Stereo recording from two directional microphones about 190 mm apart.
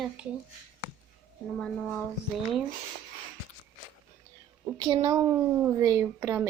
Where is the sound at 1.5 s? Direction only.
5° left (ahead or behind).